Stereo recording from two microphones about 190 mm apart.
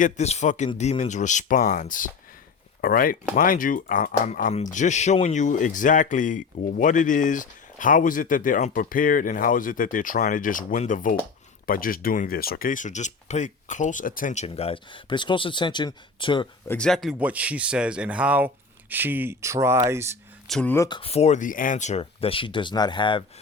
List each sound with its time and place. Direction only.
0.0 s speech: 35° left (ahead or behind)
16.6 s a man's voice: 5° left (ahead or behind); by 20.1 s 15° right (ahead or behind)
20.5 s speech: 5° left (ahead or behind)
20.8 s speech: 25° left (ahead or behind)